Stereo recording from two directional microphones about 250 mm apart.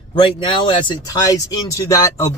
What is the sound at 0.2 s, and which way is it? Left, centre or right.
Speech, centre.